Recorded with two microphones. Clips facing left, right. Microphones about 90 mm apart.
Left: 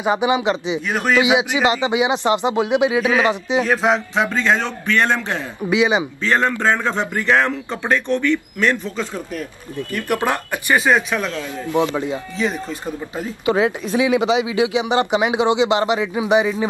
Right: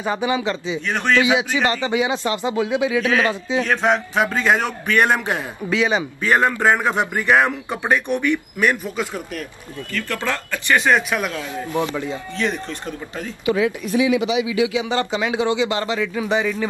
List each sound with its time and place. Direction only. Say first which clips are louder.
0.0 s a man's voice: left 4 dB; 15° left (ahead or behind)
3.6 s speech: even; 5° left (ahead or behind)
4.1 s a man's voice: even; 5° right (ahead or behind)
5.7 s speech: left 3 dB; 15° left (ahead or behind)
6.2 s a man's voice: right 2 dB; 15° right (ahead or behind)
9.9 s speech: left 4 dB; 15° left (ahead or behind)
10.8 s speech: left 1 dB; 5° left (ahead or behind)
11.7 s a man's voice: left 4 dB; 20° left (ahead or behind)
12.4 s speech: even; 5° left (ahead or behind)
13.5 s a man's voice: left 2 dB; 35° left (ahead or behind); by 16.6 s 15° left (ahead or behind)